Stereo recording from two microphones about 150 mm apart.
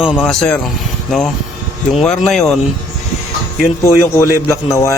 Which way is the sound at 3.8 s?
20° left (ahead or behind).